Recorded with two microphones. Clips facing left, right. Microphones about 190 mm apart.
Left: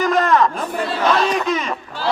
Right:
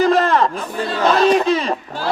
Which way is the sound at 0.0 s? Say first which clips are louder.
Right 1 dB; 30° right (ahead or behind).